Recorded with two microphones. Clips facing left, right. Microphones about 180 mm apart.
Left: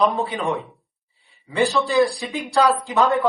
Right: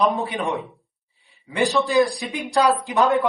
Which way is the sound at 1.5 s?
15° right (ahead or behind).